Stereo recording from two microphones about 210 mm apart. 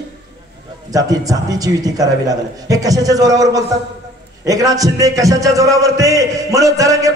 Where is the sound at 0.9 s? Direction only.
15° right (ahead or behind).